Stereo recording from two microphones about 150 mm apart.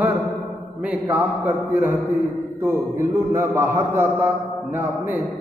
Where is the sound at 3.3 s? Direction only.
20° right (ahead or behind).